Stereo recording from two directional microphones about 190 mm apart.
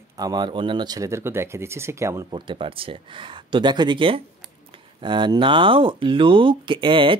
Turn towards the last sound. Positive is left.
turn(degrees=-25)  # may be behind; listen again after turning